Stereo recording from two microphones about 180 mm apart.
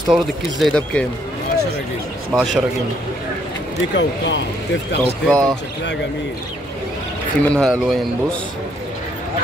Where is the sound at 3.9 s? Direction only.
80° left.